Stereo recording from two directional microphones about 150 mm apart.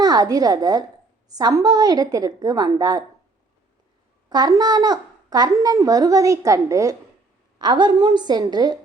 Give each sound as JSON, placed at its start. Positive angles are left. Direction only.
{"t": 0.0, "sound": "speech", "side_deg": -25}
{"t": 4.3, "sound": "speech", "side_deg": -25}